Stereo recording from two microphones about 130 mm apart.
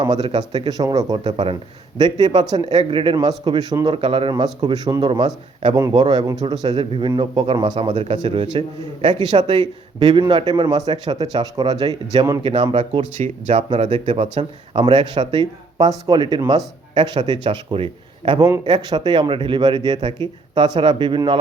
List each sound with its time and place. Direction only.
0.0 s a man's voice: 35° right (ahead or behind)
3.9 s speech: 45° right (ahead or behind)
4.6 s a man's voice: 30° right (ahead or behind)
12.4 s speech: 45° right (ahead or behind)
13.1 s speech: 55° right (ahead or behind)
13.7 s a man's voice: 45° right (ahead or behind)
18.3 s a man's voice: 30° right (ahead or behind)